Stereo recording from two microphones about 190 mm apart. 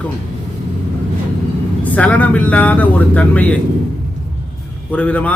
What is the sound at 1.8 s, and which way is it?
Speech, 10° left (ahead or behind).